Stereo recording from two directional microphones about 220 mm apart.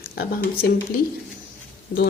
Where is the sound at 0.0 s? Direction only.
40° left (ahead or behind).